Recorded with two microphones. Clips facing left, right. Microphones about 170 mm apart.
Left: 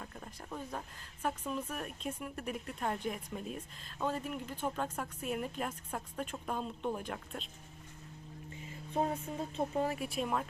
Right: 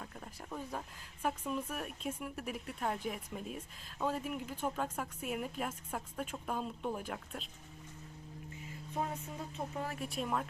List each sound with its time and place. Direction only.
0.5 s speech: 5° right (ahead or behind)
9.6 s speech: 20° left (ahead or behind)
10.0 s speech: 5° left (ahead or behind)